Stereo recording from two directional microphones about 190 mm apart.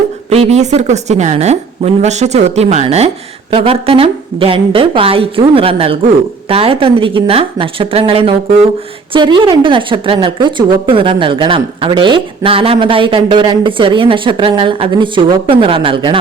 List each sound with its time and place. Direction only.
0.3 s a woman's voice: 35° right (ahead or behind)